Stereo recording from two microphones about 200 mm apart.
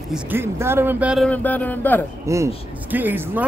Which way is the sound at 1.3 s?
10° left (ahead or behind).